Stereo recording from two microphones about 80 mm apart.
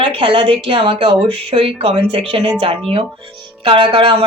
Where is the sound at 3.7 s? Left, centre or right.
Right.